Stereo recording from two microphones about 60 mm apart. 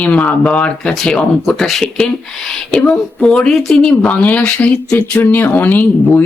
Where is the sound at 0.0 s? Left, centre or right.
Left.